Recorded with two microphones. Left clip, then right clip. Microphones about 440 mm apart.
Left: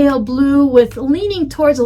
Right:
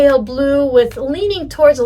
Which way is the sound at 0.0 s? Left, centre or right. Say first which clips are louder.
Right 3 dB; centre.